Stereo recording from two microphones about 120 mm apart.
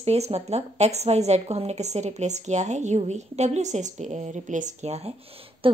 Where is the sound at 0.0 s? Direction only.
60° right (ahead or behind).